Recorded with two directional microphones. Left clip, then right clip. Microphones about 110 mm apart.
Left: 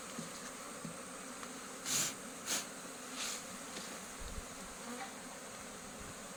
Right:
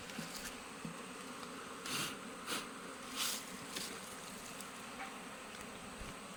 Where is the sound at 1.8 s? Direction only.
50° left (ahead or behind).